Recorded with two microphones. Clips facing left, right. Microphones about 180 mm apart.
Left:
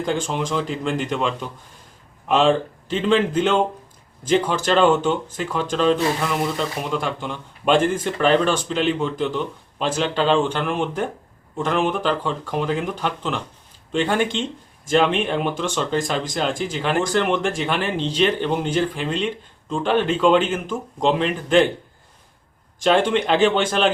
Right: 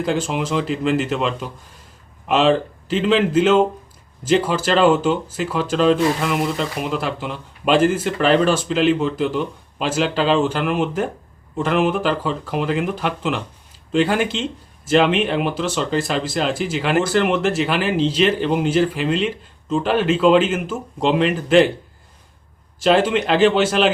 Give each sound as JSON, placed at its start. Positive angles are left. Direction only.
{"t": 0.0, "sound": "speech", "side_deg": -5}
{"t": 22.8, "sound": "speech", "side_deg": -5}